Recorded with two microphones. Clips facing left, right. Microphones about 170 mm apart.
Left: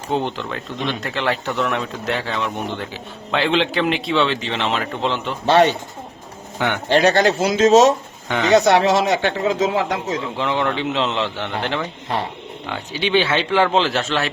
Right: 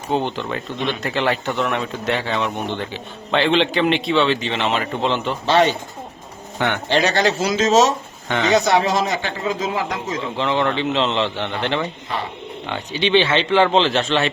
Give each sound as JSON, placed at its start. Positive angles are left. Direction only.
{"t": 0.1, "sound": "speech", "side_deg": 0}
{"t": 5.5, "sound": "speech", "side_deg": 60}
{"t": 7.0, "sound": "speech", "side_deg": 55}
{"t": 8.3, "sound": "speech", "side_deg": 0}
{"t": 8.5, "sound": "speech", "side_deg": 65}
{"t": 10.3, "sound": "a man's voice", "side_deg": 10}